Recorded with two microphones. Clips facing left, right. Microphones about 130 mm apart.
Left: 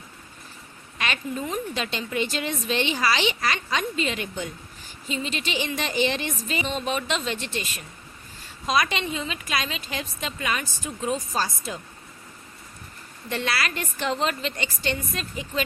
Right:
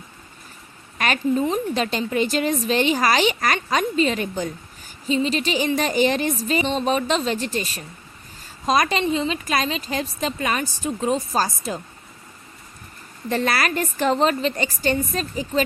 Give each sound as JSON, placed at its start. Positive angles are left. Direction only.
{"t": 0.9, "sound": "a sound", "side_deg": -45}
{"t": 1.3, "sound": "a woman's voice", "side_deg": -30}
{"t": 13.2, "sound": "a woman's voice", "side_deg": -40}